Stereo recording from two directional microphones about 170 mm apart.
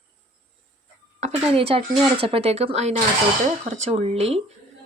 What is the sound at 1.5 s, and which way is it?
A woman's voice, 35° right (ahead or behind).